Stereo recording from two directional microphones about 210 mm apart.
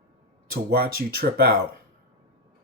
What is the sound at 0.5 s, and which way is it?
Speech, 45° right (ahead or behind).